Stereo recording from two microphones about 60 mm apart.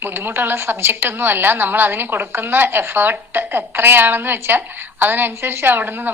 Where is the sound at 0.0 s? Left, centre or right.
Right.